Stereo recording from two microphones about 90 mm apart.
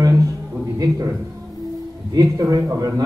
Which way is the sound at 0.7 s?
40° right (ahead or behind).